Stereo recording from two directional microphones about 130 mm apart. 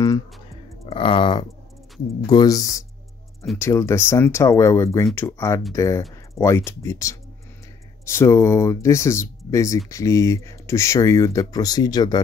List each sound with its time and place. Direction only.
0.8 s speech: 40° left (ahead or behind)